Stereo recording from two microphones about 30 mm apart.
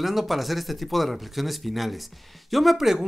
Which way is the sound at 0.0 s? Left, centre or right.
Centre.